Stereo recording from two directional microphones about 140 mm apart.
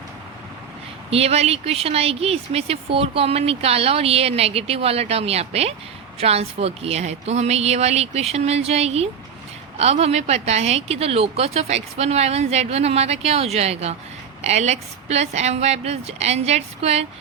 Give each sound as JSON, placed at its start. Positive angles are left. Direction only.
{"t": 1.1, "sound": "speech", "side_deg": -45}